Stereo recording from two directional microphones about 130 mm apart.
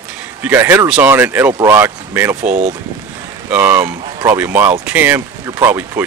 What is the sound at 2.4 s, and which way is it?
Speech, 75° right (ahead or behind).